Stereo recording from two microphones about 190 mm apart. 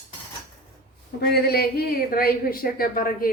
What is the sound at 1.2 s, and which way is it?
A woman's voice, 55° left (ahead or behind).